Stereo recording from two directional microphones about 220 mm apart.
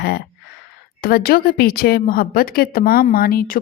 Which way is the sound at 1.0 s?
40° left (ahead or behind).